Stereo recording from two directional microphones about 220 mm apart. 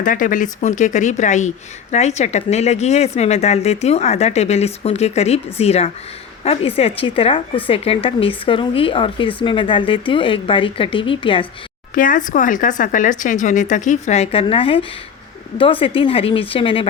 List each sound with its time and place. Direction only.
0.0 s speech: 35° left (ahead or behind)
11.9 s speech: 35° left (ahead or behind)